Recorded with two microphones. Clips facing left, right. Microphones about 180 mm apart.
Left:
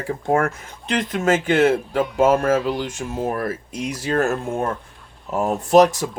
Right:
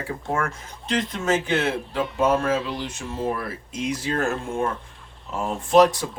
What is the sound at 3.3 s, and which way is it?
Speech, 45° left (ahead or behind).